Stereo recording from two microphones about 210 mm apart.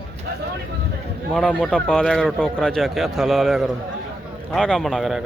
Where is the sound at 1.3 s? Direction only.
5° left (ahead or behind).